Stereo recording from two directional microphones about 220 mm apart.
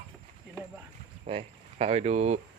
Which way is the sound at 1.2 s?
30° right (ahead or behind).